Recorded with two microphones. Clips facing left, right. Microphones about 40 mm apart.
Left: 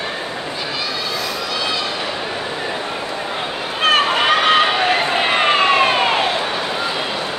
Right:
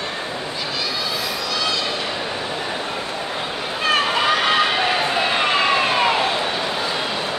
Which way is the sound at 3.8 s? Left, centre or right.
Left.